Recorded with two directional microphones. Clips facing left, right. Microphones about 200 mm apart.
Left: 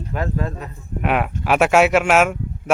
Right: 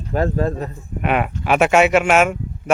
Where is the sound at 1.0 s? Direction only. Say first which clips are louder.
Right 1 dB; centre (ahead or behind).